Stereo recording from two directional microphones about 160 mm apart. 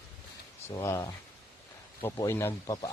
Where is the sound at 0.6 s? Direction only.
15° left (ahead or behind).